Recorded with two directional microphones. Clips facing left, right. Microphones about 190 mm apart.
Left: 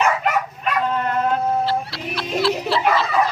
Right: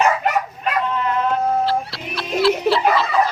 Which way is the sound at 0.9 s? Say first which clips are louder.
Even; 50° left (ahead or behind).